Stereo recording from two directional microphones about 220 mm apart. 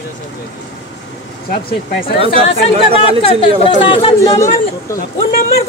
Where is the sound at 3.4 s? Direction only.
25° left (ahead or behind).